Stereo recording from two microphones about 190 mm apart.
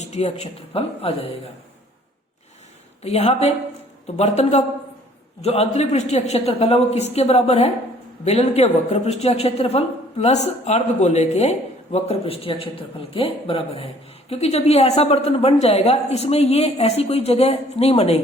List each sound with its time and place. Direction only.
0.0 s speech: 35° left (ahead or behind)
3.0 s speech: 35° left (ahead or behind)